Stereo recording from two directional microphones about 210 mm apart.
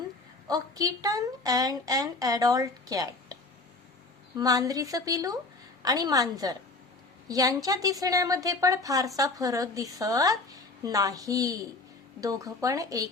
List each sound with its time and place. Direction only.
0.4 s a woman's voice: 15° right (ahead or behind)
4.4 s a woman's voice: 15° right (ahead or behind)